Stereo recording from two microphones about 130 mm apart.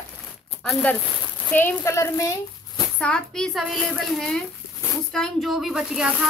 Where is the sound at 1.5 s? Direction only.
15° left (ahead or behind).